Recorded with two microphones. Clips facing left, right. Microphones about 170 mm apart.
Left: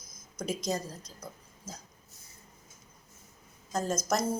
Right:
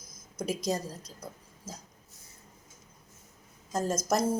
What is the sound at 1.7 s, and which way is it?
Dog, 30° right (ahead or behind).